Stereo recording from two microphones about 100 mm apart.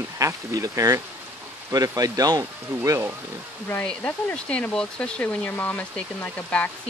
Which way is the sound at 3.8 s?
10° left (ahead or behind).